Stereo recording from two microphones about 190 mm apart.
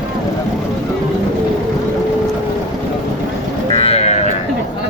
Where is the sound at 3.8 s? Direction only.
35° left (ahead or behind).